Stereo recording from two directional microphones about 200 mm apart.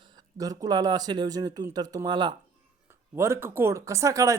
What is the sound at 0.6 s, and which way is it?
Speech, 20° right (ahead or behind).